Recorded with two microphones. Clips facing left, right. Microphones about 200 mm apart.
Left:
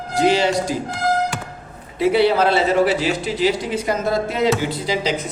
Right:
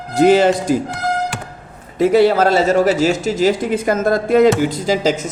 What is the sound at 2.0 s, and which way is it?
A man's voice, 45° right (ahead or behind).